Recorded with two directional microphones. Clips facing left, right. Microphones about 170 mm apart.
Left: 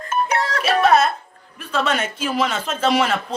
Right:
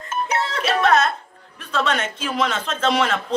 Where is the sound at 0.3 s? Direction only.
25° right (ahead or behind).